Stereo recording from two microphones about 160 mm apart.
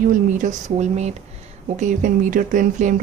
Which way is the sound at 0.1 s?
55° right (ahead or behind).